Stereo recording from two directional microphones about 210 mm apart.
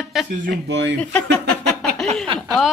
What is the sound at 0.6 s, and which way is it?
Speech, 55° right (ahead or behind).